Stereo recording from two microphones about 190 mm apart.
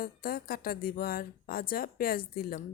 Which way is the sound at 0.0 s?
50° left (ahead or behind).